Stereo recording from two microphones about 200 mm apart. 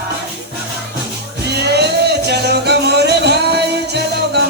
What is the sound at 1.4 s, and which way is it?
Music, 55° right (ahead or behind).